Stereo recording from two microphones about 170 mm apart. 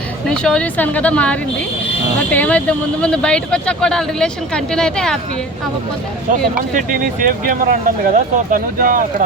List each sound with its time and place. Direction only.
0.3 s speech: 5° left (ahead or behind)
6.6 s speech: 55° right (ahead or behind)